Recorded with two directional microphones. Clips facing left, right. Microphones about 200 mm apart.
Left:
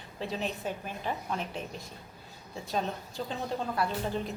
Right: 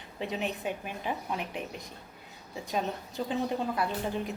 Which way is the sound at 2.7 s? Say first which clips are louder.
Even; 10° right (ahead or behind).